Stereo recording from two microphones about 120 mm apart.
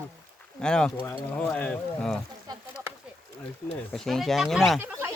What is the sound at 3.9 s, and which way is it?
Speech, 5° left (ahead or behind).